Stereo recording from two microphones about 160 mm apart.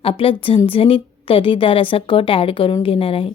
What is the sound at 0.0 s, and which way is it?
A woman's voice, 35° left (ahead or behind).